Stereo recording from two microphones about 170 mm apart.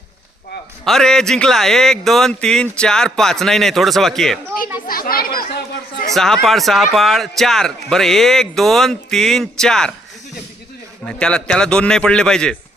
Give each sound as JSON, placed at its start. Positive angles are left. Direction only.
{"t": 0.9, "sound": "speech", "side_deg": 0}
{"t": 4.9, "sound": "speech", "side_deg": 60}
{"t": 6.1, "sound": "speech", "side_deg": 0}
{"t": 11.0, "sound": "speech", "side_deg": 5}